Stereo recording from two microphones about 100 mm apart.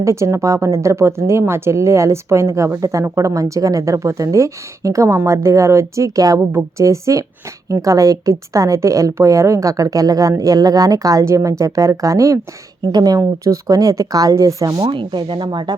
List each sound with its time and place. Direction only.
0.0 s a woman's voice: 30° right (ahead or behind)
14.9 s speech: 50° right (ahead or behind)